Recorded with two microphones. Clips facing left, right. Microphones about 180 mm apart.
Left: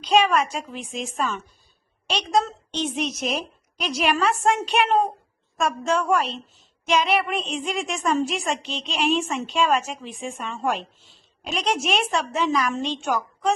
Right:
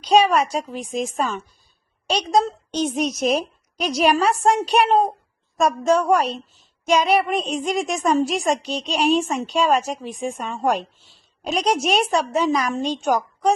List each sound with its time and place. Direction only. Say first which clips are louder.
0.0 s a child's voice: right 3 dB; 40° right (ahead or behind)